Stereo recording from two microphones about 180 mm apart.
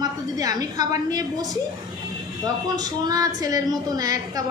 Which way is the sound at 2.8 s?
20° right (ahead or behind).